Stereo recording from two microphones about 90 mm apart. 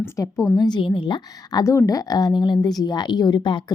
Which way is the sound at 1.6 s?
35° left (ahead or behind).